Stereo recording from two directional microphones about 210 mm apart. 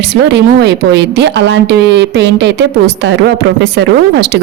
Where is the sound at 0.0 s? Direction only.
55° right (ahead or behind).